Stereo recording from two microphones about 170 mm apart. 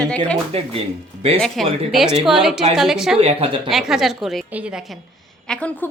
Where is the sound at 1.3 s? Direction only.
Centre (ahead or behind).